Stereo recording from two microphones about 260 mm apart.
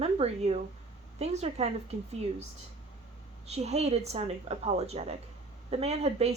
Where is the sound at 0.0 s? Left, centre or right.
Right.